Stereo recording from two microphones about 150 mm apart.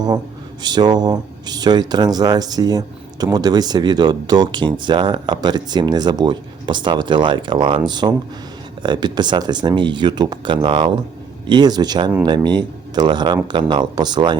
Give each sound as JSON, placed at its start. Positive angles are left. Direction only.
{"t": 0.6, "sound": "speech", "side_deg": -30}